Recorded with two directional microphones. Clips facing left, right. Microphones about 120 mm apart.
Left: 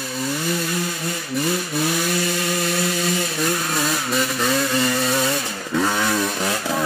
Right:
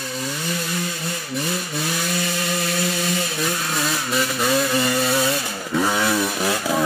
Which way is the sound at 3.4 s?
Centre (ahead or behind).